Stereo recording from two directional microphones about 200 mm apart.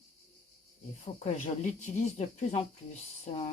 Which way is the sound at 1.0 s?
30° left (ahead or behind).